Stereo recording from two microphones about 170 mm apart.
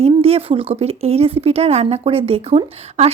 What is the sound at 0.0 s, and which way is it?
Speech, 35° right (ahead or behind).